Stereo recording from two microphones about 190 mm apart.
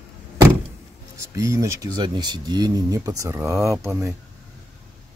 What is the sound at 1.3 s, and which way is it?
Speech, 15° right (ahead or behind).